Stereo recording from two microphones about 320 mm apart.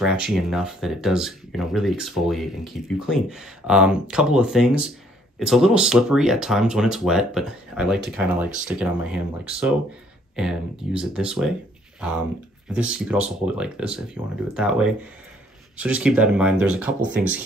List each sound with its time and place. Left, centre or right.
0.0 s speech: centre
17.2 s speech: right